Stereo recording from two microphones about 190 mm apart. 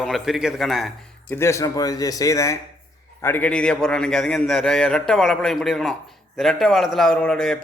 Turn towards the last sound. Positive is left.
turn(degrees=5)  # may be behind; listen again after turning